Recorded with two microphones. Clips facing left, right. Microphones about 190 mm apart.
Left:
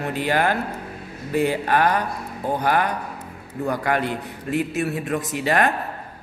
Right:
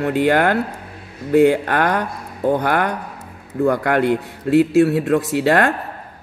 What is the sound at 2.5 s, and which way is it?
A man's voice, 70° right (ahead or behind).